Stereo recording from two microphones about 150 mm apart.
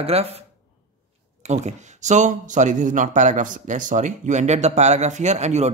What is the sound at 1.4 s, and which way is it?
Speech, 50° right (ahead or behind).